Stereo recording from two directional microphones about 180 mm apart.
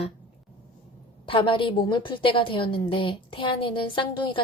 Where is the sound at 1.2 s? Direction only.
30° left (ahead or behind).